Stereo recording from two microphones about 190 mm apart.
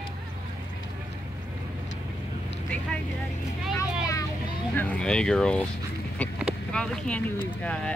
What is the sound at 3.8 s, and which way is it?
Vehicle, 15° left (ahead or behind).